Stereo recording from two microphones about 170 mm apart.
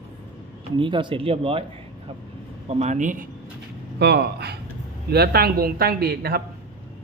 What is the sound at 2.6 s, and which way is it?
Speech, 40° right (ahead or behind).